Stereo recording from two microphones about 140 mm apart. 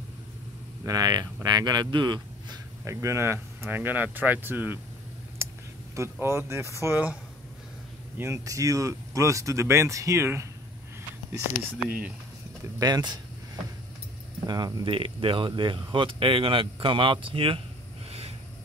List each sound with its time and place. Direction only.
0.8 s speech: 25° right (ahead or behind)
2.8 s speech: 20° right (ahead or behind)
5.9 s speech: 20° right (ahead or behind)
8.2 s speech: 20° right (ahead or behind)
12.7 s speech: 25° right (ahead or behind)
14.4 s speech: 30° right (ahead or behind)